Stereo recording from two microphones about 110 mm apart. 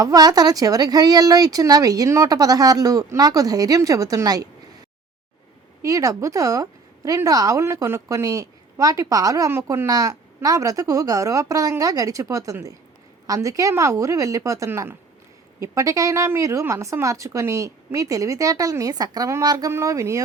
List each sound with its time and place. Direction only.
0.0 s speech: 35° right (ahead or behind)
5.8 s a woman's voice: 30° right (ahead or behind)
14.7 s speech: 20° right (ahead or behind)
15.6 s speech: 30° right (ahead or behind)